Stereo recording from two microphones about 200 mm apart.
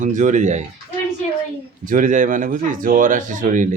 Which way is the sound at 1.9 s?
40° right (ahead or behind).